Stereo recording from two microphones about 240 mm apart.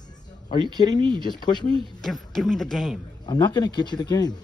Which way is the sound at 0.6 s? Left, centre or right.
Centre.